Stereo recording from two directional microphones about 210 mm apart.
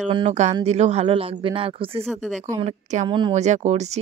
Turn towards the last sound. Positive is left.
turn(degrees=-35)  # may be behind; listen again after turning